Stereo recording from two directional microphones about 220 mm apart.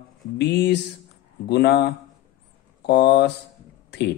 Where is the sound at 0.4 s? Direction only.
50° left (ahead or behind).